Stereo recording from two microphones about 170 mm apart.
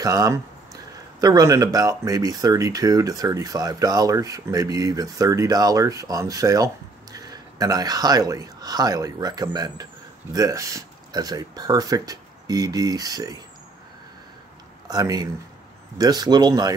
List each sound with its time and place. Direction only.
0.0 s speech: 20° right (ahead or behind)
14.9 s speech: 20° right (ahead or behind)